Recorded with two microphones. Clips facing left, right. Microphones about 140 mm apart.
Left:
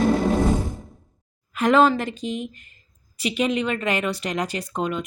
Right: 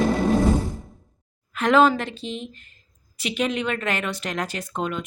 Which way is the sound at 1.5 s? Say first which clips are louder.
Even; centre (ahead or behind).